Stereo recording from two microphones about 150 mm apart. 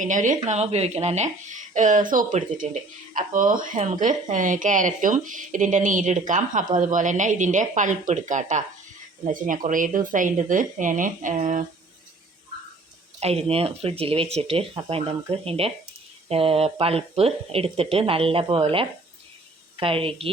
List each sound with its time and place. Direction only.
0.0 s speech: 60° right (ahead or behind)
0.4 s speech: 50° right (ahead or behind)
13.1 s speech: 45° right (ahead or behind)